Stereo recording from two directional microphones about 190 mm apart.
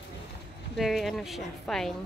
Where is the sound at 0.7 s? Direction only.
Centre (ahead or behind).